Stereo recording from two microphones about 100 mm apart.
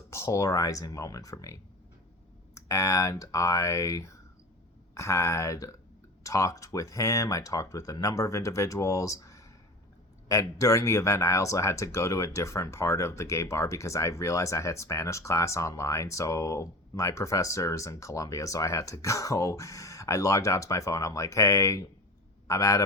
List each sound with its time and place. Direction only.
0.1 s speech: 30° left (ahead or behind)
2.6 s speech: 30° left (ahead or behind)